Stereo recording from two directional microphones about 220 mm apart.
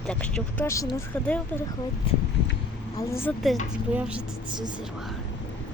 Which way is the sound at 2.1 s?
25° left (ahead or behind).